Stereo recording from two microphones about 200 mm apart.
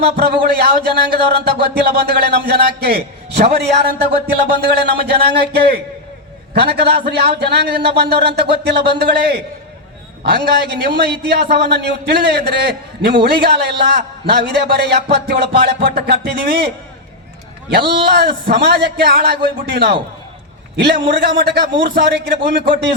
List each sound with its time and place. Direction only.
0.0 s a man's voice: 55° right (ahead or behind)